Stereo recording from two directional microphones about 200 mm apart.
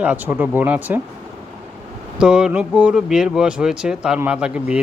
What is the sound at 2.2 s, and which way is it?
Speech, 5° right (ahead or behind).